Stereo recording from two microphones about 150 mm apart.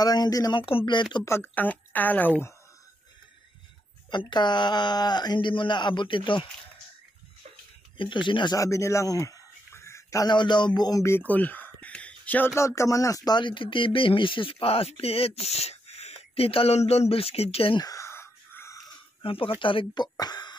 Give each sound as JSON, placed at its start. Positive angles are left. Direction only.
{"t": 0.0, "sound": "speech", "side_deg": 25}
{"t": 1.2, "sound": "a woman's voice", "side_deg": 15}
{"t": 4.1, "sound": "speech", "side_deg": 30}
{"t": 8.0, "sound": "speech", "side_deg": 35}
{"t": 12.5, "sound": "speech", "side_deg": 20}
{"t": 17.8, "sound": "a sound", "side_deg": 20}
{"t": 19.2, "sound": "speech", "side_deg": 35}